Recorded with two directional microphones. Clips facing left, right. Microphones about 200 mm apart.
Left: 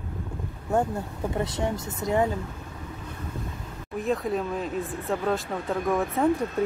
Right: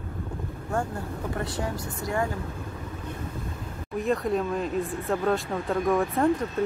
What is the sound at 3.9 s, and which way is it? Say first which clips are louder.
Speech: right 1 dB; centre (ahead or behind).